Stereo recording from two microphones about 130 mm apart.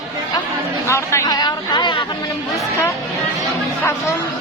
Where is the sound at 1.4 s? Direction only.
35° left (ahead or behind).